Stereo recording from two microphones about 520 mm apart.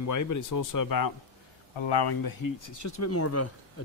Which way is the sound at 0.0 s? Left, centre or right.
Left.